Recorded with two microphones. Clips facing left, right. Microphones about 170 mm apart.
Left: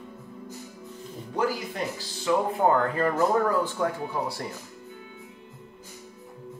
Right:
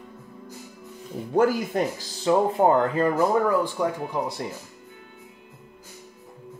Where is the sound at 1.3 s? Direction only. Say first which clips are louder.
Right 7 dB; 50° right (ahead or behind).